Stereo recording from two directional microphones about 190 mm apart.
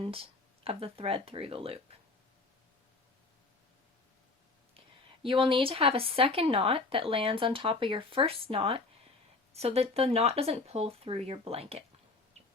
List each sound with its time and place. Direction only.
0.0 s a woman's voice: 30° right (ahead or behind)
5.2 s a woman's voice: 25° right (ahead or behind)